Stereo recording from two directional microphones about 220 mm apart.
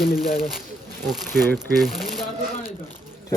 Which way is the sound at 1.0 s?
Centre (ahead or behind).